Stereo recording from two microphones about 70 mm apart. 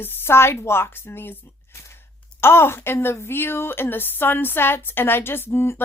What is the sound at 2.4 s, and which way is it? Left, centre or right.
A woman's voice, left.